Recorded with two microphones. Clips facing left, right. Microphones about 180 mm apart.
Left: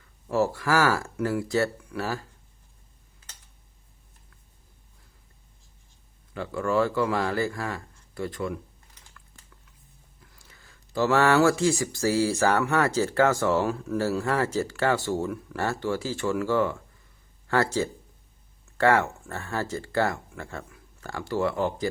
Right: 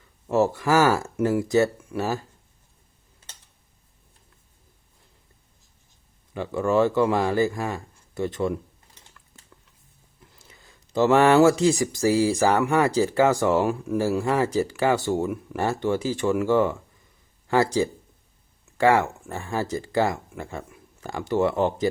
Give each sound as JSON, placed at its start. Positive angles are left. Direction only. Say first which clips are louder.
{"t": 0.3, "sound": "speech", "louder": "right 3 dB", "side_deg": -20}
{"t": 6.3, "sound": "speech", "louder": "right 3 dB", "side_deg": -20}
{"t": 10.3, "sound": "speech", "louder": "right 3 dB", "side_deg": -20}